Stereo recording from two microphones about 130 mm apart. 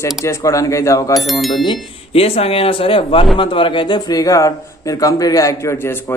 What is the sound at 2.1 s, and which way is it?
A man's voice, 50° left (ahead or behind).